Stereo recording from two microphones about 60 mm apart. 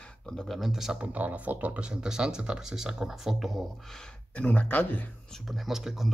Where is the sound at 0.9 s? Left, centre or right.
Right; by 3.6 s centre.